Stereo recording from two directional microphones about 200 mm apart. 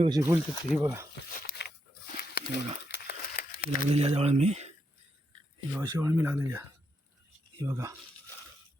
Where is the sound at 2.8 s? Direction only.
55° left (ahead or behind).